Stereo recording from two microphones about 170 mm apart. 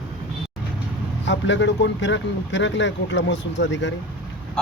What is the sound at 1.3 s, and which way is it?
Speech, 90° left.